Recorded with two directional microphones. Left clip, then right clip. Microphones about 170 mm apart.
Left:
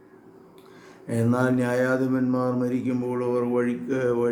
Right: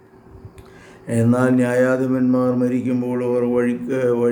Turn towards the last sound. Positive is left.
turn(degrees=-15)  # may be behind; listen again after turning